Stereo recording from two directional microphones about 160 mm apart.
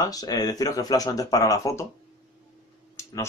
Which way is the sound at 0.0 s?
25° left (ahead or behind).